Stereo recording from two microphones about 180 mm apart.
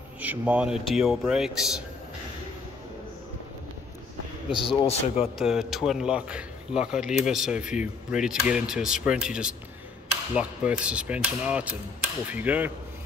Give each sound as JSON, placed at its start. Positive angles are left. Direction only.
{"t": 0.2, "sound": "speech", "side_deg": -10}
{"t": 4.5, "sound": "a man's voice", "side_deg": 30}
{"t": 5.4, "sound": "speech", "side_deg": -5}